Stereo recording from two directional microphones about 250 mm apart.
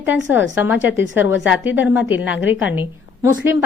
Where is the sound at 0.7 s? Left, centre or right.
Left.